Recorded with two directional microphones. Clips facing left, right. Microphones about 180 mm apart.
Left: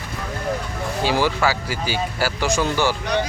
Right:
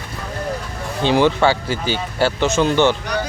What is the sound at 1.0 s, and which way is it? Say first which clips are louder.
Speech: right 5 dB; 20° right (ahead or behind).